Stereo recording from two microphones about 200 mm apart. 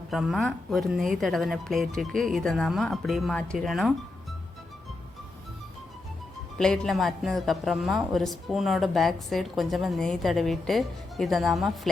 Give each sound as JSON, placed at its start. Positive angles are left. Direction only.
{"t": 0.1, "sound": "a woman's voice", "side_deg": 0}
{"t": 6.6, "sound": "a woman's voice", "side_deg": 5}